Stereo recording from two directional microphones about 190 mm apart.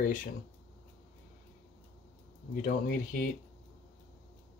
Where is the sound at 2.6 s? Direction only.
50° left (ahead or behind).